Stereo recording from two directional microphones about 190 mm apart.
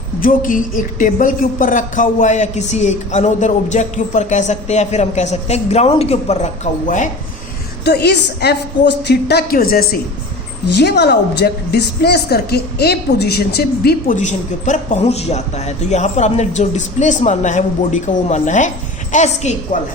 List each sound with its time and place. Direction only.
0.2 s a woman's voice: 45° left (ahead or behind)
7.9 s a woman's voice: 60° left (ahead or behind)
10.8 s a woman's voice: 65° left (ahead or behind)
14.2 s a woman's voice: 40° left (ahead or behind)